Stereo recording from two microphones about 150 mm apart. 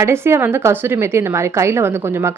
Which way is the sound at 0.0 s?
15° right (ahead or behind).